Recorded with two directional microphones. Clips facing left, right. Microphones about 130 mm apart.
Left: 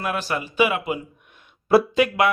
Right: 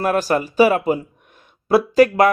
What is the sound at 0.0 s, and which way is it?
Speech, 40° right (ahead or behind).